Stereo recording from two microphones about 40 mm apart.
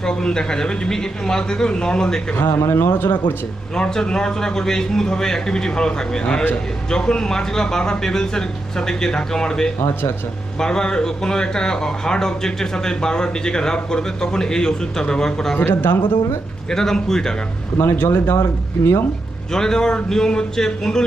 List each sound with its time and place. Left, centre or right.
0.0 s speech: centre
2.4 s speech: left
3.8 s speech: centre
15.6 s speech: left
16.6 s speech: centre
17.7 s speech: left
18.8 s speech: left
19.5 s speech: centre